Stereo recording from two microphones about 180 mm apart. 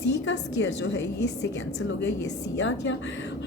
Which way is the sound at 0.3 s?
75° left (ahead or behind).